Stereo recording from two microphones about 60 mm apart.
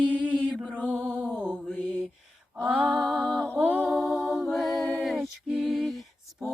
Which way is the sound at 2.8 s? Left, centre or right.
Centre.